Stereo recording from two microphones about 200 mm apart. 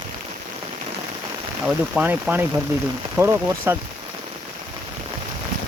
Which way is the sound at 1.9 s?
10° right (ahead or behind).